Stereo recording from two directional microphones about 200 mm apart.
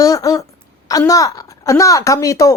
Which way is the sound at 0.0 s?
15° left (ahead or behind).